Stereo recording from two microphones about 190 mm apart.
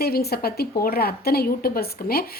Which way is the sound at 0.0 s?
55° left (ahead or behind).